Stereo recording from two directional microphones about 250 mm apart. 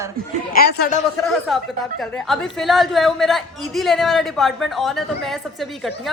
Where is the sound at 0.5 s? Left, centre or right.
Left.